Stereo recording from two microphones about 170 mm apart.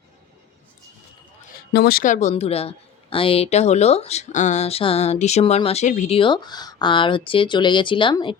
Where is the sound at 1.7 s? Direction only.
65° left (ahead or behind); by 6.1 s 45° left (ahead or behind).